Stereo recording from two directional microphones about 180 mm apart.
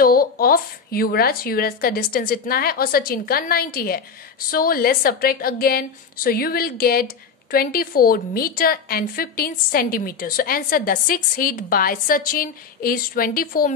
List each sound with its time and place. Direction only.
0.0 s a woman's voice: 55° left (ahead or behind)